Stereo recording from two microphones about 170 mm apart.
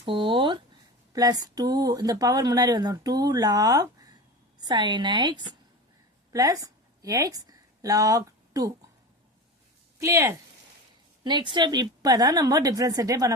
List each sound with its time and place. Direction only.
0.0 s a sound: 30° right (ahead or behind)
1.1 s a woman's voice: 20° right (ahead or behind)
10.0 s speech: 15° right (ahead or behind)